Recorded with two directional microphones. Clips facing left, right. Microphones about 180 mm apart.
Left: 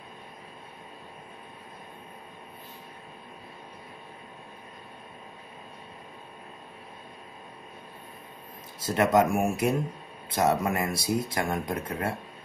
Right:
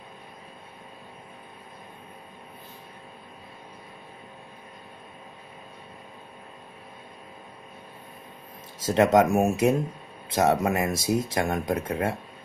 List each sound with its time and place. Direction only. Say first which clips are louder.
8.8 s speech: right 3 dB; 20° right (ahead or behind)